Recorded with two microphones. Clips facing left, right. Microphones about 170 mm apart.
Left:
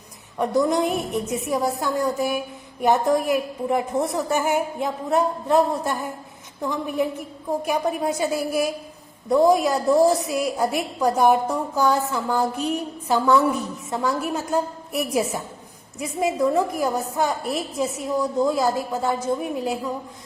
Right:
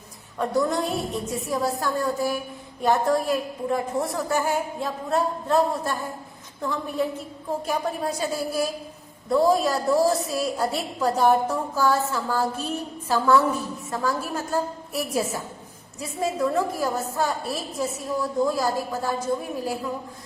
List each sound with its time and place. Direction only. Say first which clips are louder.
0.3 s a woman's voice: left 3 dB; 20° left (ahead or behind)